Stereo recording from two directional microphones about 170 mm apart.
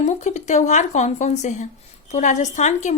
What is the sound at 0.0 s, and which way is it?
A woman's voice, 45° left (ahead or behind).